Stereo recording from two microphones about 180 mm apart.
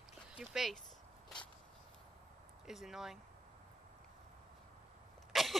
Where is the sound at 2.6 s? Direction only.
Centre (ahead or behind).